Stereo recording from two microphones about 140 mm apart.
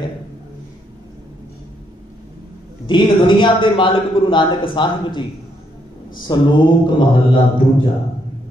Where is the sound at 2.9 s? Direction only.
35° left (ahead or behind).